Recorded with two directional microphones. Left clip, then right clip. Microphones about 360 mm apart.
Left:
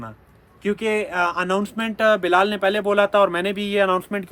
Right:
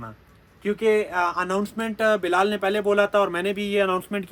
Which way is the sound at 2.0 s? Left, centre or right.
Centre.